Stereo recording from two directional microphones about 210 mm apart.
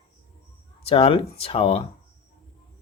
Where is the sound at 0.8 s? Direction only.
25° left (ahead or behind).